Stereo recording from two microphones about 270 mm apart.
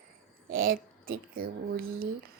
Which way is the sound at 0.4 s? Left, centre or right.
Right.